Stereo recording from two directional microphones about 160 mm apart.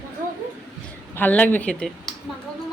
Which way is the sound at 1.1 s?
10° left (ahead or behind).